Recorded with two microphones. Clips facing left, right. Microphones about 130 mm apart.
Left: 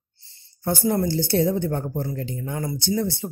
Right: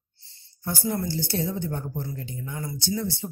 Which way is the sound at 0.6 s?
65° left (ahead or behind).